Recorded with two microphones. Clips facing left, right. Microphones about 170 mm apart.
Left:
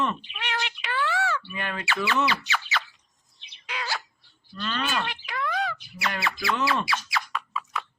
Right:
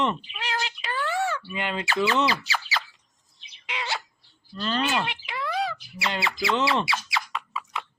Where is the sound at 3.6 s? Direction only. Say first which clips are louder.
Right 1 dB; 25° right (ahead or behind).